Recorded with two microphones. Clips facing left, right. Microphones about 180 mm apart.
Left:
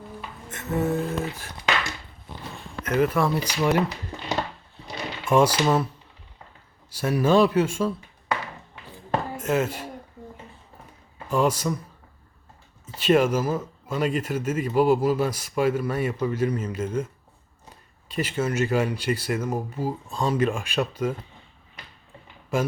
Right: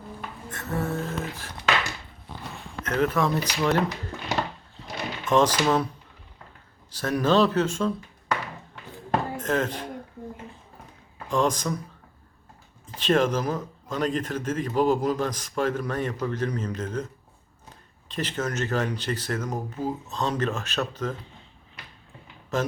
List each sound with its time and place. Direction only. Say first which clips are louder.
0.5 s music: left 4 dB; 20° left (ahead or behind)
2.8 s speech: left 2 dB; 10° left (ahead or behind)
5.2 s speech: left 1 dB; 10° left (ahead or behind)
6.9 s speech: left 2 dB; 10° left (ahead or behind)
9.4 s speech: left 2 dB; 10° left (ahead or behind)
11.3 s speech: left 2 dB; 5° left (ahead or behind)
12.8 s speech: left 2 dB; 10° left (ahead or behind)
18.1 s speech: left 3 dB; 10° left (ahead or behind)
22.5 s speech: left 2 dB; 10° left (ahead or behind)